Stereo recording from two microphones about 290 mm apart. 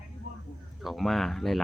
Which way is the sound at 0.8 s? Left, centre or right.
Centre.